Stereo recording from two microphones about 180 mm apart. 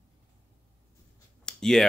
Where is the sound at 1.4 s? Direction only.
5° left (ahead or behind).